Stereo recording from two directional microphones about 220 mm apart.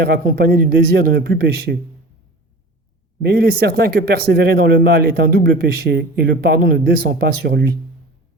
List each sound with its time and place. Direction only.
0.0 s a man's voice: 45° right (ahead or behind)
3.2 s a man's voice: 45° right (ahead or behind)